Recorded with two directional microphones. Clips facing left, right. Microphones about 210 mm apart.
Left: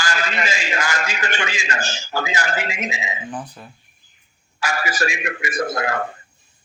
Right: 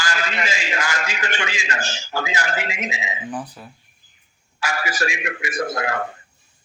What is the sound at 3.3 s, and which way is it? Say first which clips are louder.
Speech: right 1 dB; 5° right (ahead or behind).